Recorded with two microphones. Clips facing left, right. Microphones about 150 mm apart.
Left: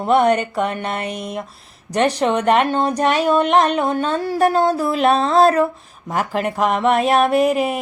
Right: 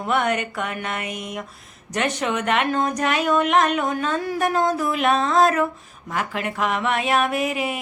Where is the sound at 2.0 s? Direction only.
35° left (ahead or behind).